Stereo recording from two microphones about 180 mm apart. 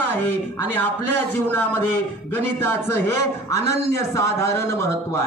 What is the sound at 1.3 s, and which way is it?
A man's voice, 10° left (ahead or behind).